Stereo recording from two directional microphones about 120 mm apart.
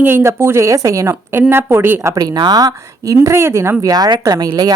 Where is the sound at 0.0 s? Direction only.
20° right (ahead or behind).